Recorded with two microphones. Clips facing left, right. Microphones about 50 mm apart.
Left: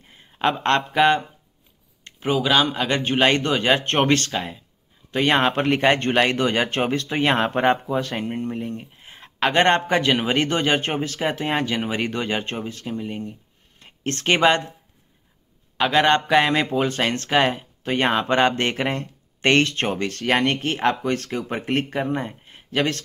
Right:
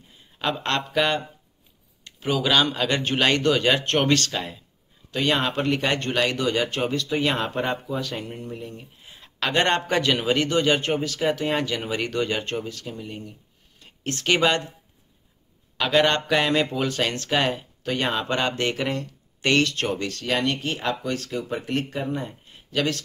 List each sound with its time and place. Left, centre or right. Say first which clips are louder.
0.1 s speech: left 5 dB; left
2.0 s a sound: left 3 dB; left
2.4 s speech: even; centre; by 4.3 s left
4.3 s speech: left 3 dB; centre
5.1 s speech: left 4 dB; left
15.8 s speech: left 3 dB; centre; by 22.3 s left
22.4 s a sound: left 2 dB; left